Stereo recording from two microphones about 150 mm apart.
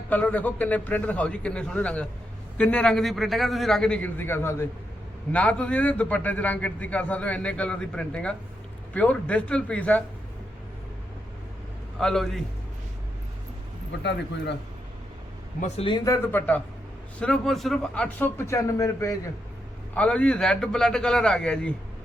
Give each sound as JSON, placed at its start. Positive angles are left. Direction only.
{"t": 0.1, "sound": "a man's voice", "side_deg": 10}
{"t": 11.9, "sound": "a man's voice", "side_deg": 5}
{"t": 15.8, "sound": "a man's voice", "side_deg": 30}
{"t": 16.0, "sound": "a man's voice", "side_deg": 20}
{"t": 18.4, "sound": "a man's voice", "side_deg": 20}
{"t": 19.9, "sound": "a man's voice", "side_deg": 10}